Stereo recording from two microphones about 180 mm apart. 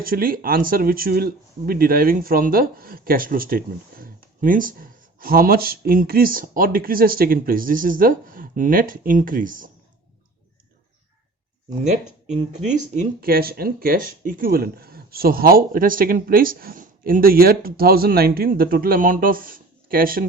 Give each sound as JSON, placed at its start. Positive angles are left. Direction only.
{"t": 0.0, "sound": "speech", "side_deg": -55}
{"t": 12.3, "sound": "speech", "side_deg": -40}
{"t": 13.2, "sound": "speech", "side_deg": -55}